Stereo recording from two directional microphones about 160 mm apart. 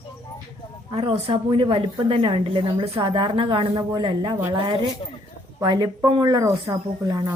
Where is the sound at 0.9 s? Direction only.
35° right (ahead or behind).